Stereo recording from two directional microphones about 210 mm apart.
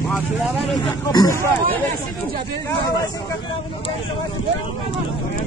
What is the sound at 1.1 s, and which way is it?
Speech, 15° left (ahead or behind).